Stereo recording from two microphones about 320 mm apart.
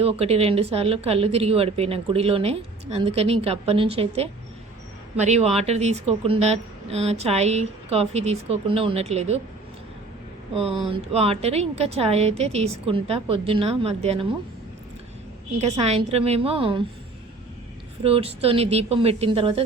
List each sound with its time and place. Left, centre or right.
0.0 s a woman's voice: centre
10.5 s a woman's voice: centre
15.7 s a woman's voice: centre
18.0 s a woman's voice: centre